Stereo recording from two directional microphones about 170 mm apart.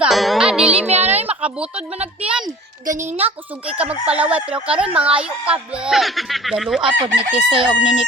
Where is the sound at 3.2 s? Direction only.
5° right (ahead or behind).